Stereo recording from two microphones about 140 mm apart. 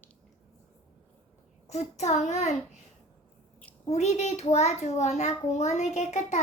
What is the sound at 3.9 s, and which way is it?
Child singing, 55° left (ahead or behind).